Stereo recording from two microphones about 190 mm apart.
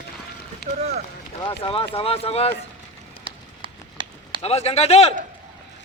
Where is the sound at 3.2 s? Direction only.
25° right (ahead or behind).